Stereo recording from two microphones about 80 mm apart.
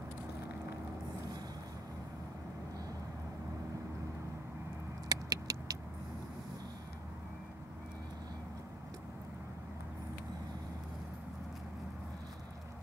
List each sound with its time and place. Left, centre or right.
5.0 s rodents: right